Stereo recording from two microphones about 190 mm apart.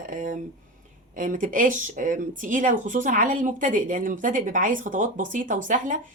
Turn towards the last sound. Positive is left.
turn(degrees=-45)  # may be behind; listen again after turning